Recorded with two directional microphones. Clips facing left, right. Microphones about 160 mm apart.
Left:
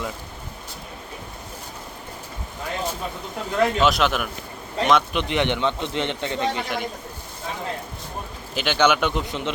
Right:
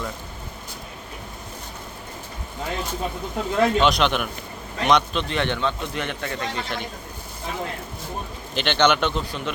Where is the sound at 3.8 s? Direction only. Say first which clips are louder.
Even; 5° left (ahead or behind).